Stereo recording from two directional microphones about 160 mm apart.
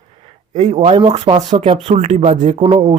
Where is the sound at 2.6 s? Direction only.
35° right (ahead or behind).